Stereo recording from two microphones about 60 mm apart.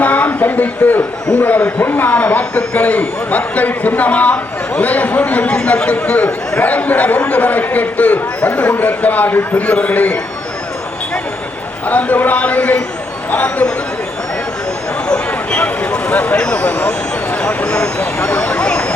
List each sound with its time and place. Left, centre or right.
0.0 s a man's voice: left
11.9 s a man's voice: left
15.0 s a sound: centre
16.2 s a man's voice: left